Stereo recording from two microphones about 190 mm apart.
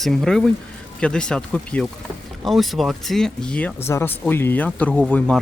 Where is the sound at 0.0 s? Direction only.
Centre (ahead or behind).